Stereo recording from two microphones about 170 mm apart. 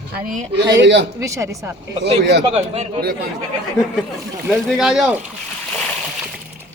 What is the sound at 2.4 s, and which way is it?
Speech, 35° right (ahead or behind).